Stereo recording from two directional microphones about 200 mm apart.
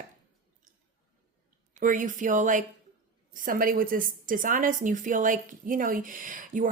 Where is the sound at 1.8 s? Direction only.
40° right (ahead or behind).